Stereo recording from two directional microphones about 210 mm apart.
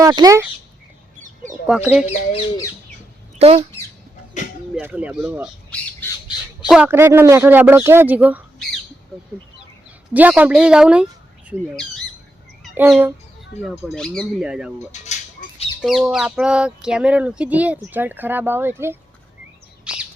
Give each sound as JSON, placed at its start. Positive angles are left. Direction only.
{"t": 0.0, "sound": "speech", "side_deg": -15}
{"t": 1.6, "sound": "speech", "side_deg": -5}
{"t": 3.3, "sound": "speech", "side_deg": -30}
{"t": 4.7, "sound": "speech", "side_deg": -5}
{"t": 6.7, "sound": "speech", "side_deg": -5}
{"t": 10.2, "sound": "speech", "side_deg": -5}
{"t": 12.6, "sound": "a sound", "side_deg": -5}
{"t": 13.7, "sound": "speech", "side_deg": 5}
{"t": 15.0, "sound": "a sound", "side_deg": 35}
{"t": 15.8, "sound": "speech", "side_deg": 0}
{"t": 19.8, "sound": "bird", "side_deg": -5}